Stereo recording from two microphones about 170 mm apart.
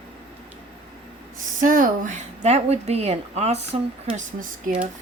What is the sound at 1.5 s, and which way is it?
Speech, 50° right (ahead or behind).